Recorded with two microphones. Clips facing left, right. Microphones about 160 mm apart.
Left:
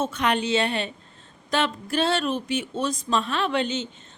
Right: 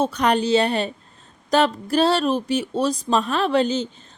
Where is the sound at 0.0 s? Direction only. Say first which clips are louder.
Right 5 dB; 40° right (ahead or behind).